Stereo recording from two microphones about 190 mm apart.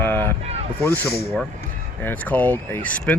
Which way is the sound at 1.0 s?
55° left (ahead or behind).